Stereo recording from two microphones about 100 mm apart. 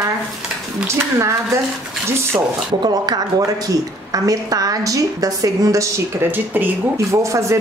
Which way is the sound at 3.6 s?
35° right (ahead or behind).